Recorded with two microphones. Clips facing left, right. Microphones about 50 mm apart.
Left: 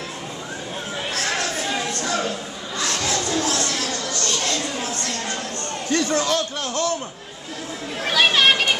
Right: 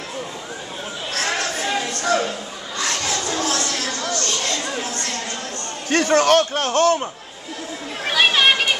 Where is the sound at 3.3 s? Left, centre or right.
Right.